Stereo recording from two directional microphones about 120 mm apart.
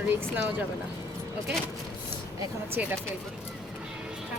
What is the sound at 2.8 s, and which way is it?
Speech, 15° right (ahead or behind).